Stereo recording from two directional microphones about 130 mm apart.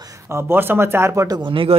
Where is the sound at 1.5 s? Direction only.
40° right (ahead or behind).